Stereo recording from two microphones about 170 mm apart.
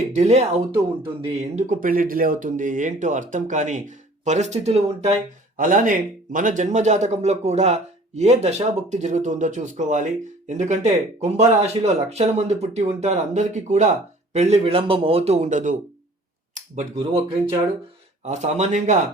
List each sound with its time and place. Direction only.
0.1 s a man's voice: 40° right (ahead or behind)
5.5 s a man's voice: 50° right (ahead or behind); by 17.2 s 35° right (ahead or behind)
18.3 s a man's voice: 40° right (ahead or behind)